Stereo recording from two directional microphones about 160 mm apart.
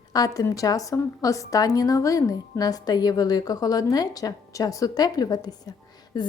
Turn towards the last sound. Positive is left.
turn(degrees=25)  # may be behind; listen again after turning